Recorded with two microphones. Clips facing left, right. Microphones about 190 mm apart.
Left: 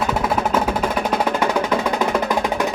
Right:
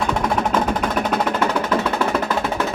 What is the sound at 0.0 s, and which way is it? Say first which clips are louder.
Music: even; 5° left (ahead or behind).